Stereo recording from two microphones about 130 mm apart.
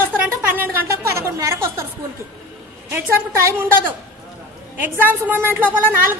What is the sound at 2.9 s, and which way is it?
A woman's voice, 15° right (ahead or behind).